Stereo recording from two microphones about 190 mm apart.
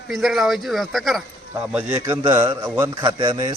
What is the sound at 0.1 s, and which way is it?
Speech, centre (ahead or behind).